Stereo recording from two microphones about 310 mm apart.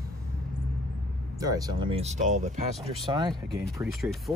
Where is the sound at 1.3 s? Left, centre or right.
Centre.